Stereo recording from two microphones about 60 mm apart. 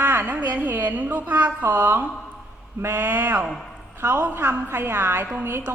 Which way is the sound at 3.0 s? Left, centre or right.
Right.